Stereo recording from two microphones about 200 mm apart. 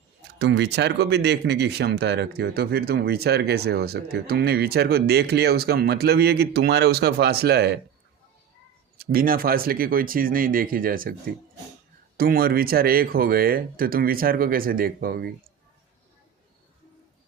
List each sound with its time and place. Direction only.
0.2 s speech: 60° right (ahead or behind)
9.0 s speech: 45° right (ahead or behind)
12.1 s speech: 50° right (ahead or behind)